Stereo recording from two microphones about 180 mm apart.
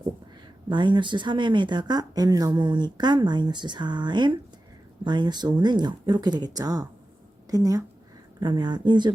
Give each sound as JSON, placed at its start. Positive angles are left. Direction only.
{"t": 0.7, "sound": "speech", "side_deg": -25}